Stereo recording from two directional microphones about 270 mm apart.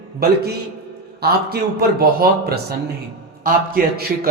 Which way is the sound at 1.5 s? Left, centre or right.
Right.